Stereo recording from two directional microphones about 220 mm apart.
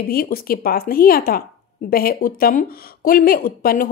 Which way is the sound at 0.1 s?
40° left (ahead or behind).